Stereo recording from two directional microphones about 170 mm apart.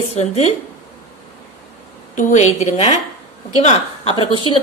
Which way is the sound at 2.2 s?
45° left (ahead or behind).